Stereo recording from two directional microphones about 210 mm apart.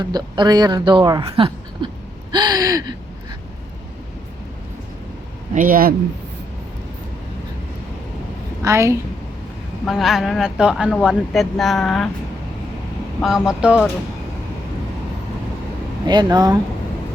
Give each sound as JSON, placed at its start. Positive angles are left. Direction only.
{"t": 0.0, "sound": "speech", "side_deg": -20}
{"t": 5.5, "sound": "speech", "side_deg": -40}
{"t": 8.6, "sound": "a woman's voice", "side_deg": -15}
{"t": 9.8, "sound": "speech", "side_deg": 0}
{"t": 13.2, "sound": "speech", "side_deg": 0}
{"t": 16.0, "sound": "speech", "side_deg": -20}